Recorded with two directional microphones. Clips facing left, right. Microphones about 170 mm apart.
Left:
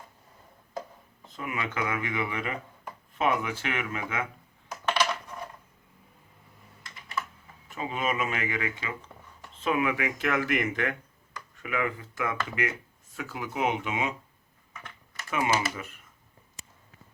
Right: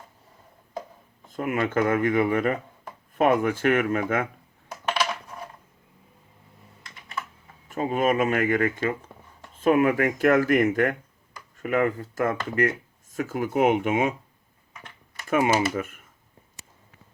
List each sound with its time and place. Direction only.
1.3 s speech: 50° right (ahead or behind)
7.7 s speech: 45° right (ahead or behind)
15.3 s speech: 50° right (ahead or behind)